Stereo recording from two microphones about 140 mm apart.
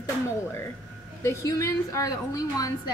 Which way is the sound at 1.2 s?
20° left (ahead or behind).